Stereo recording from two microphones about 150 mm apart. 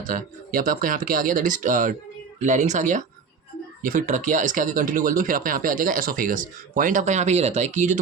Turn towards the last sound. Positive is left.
turn(degrees=-55)  # may be behind; listen again after turning